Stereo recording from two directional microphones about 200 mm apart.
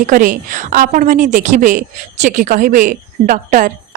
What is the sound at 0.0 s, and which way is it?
A woman's voice, 40° right (ahead or behind).